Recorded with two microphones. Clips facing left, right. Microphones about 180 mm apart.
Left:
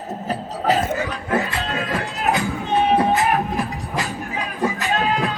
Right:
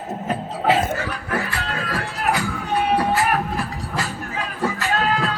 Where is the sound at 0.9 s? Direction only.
20° left (ahead or behind).